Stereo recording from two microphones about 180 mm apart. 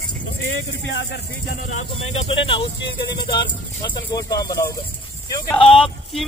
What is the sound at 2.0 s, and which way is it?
Speech, 30° left (ahead or behind).